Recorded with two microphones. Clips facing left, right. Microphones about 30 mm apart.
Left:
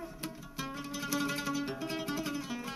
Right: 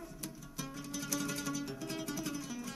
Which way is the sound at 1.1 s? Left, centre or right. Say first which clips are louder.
Left 5 dB; left.